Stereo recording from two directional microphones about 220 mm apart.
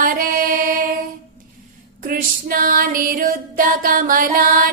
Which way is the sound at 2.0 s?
40° right (ahead or behind).